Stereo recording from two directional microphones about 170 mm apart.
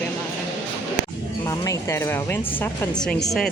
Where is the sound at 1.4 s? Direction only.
20° left (ahead or behind).